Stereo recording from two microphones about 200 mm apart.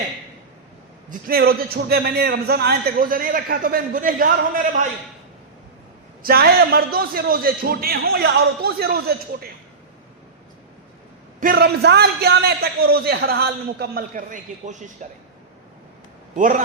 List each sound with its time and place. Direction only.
1.3 s a man's voice: 50° right (ahead or behind)
6.2 s a man's voice: 50° right (ahead or behind)
11.3 s a man's voice: 45° right (ahead or behind)
16.4 s a man's voice: 40° right (ahead or behind)